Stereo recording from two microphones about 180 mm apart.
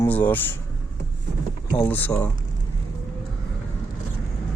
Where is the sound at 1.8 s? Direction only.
10° left (ahead or behind).